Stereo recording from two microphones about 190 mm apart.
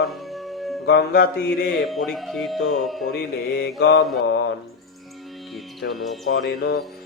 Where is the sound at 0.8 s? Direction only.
60° left (ahead or behind).